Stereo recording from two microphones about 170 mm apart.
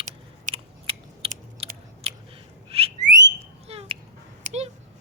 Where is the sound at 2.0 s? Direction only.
35° right (ahead or behind).